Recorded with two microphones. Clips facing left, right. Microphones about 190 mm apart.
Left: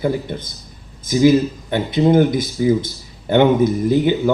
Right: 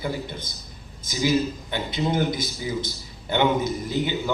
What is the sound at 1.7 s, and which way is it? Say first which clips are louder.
Speech: left 11 dB; 50° left (ahead or behind).